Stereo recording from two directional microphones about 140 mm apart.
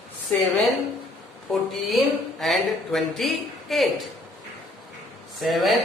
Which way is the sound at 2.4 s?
Centre (ahead or behind).